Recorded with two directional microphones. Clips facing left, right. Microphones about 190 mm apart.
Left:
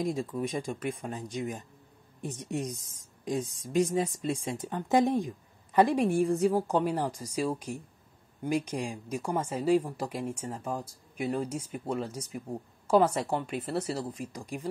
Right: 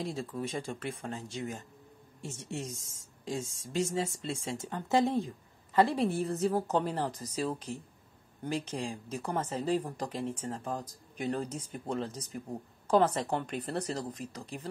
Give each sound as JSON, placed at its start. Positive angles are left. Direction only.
{"t": 0.0, "sound": "speech", "side_deg": 15}
{"t": 2.2, "sound": "speech", "side_deg": 15}